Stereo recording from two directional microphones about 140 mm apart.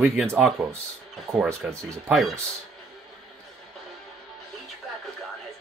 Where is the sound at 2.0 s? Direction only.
Centre (ahead or behind).